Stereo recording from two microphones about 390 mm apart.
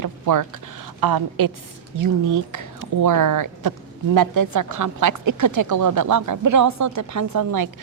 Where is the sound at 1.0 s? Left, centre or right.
Right.